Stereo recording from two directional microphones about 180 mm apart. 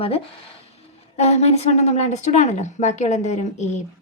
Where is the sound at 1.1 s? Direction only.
35° left (ahead or behind).